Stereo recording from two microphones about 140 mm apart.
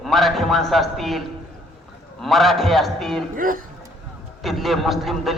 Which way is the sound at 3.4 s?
75° right (ahead or behind).